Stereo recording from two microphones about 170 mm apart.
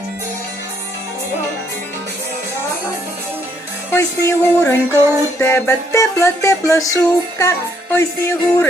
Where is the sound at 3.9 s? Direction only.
20° left (ahead or behind).